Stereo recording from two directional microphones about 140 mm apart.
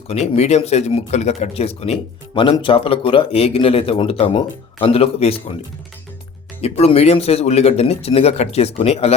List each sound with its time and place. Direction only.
0.1 s speech: 50° left (ahead or behind)
6.6 s speech: 45° left (ahead or behind)